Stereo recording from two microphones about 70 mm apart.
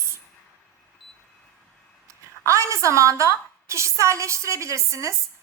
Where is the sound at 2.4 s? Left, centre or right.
Right.